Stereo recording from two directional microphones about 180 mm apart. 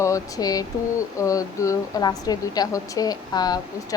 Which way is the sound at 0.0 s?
20° left (ahead or behind).